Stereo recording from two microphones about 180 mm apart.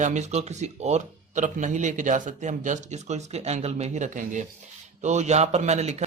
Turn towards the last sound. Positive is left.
turn(degrees=-40)  # may be behind; listen again after turning